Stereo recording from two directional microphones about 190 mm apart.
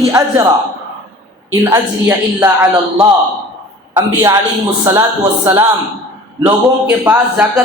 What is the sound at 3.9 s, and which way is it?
Speech, 20° right (ahead or behind).